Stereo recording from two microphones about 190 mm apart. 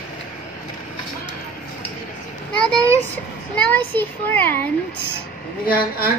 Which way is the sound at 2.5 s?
5° left (ahead or behind).